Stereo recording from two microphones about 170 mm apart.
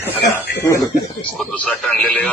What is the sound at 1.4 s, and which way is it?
Speech, 5° left (ahead or behind).